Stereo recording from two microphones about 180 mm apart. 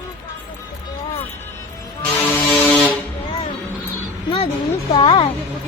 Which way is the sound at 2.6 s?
10° left (ahead or behind).